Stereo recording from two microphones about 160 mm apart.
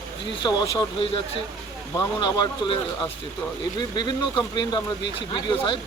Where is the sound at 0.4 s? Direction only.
30° left (ahead or behind).